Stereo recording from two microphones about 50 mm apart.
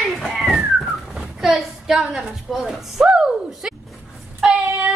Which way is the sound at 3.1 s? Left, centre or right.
Centre.